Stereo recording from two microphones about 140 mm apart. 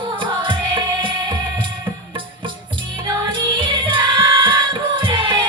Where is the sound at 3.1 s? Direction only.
35° right (ahead or behind).